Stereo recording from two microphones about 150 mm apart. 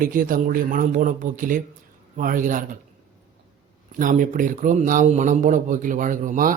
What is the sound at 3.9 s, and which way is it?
Speech, 60° right (ahead or behind).